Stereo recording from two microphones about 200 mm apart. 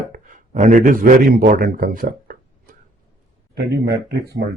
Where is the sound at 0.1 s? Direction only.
40° right (ahead or behind).